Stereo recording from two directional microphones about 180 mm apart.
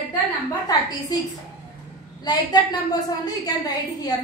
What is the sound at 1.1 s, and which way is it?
A woman's voice, 20° left (ahead or behind).